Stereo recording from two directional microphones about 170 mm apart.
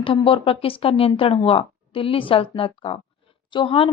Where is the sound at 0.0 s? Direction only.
30° left (ahead or behind).